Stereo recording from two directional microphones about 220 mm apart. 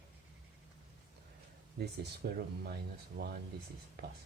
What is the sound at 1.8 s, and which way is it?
Speech, 45° right (ahead or behind).